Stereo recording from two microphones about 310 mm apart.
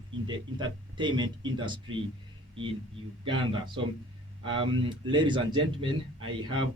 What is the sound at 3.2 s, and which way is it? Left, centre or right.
Speech, centre.